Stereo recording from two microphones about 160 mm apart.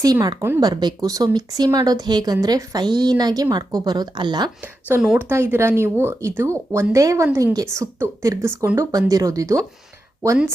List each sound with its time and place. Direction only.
0.0 s speech: 20° right (ahead or behind)
4.6 s speech: 10° right (ahead or behind)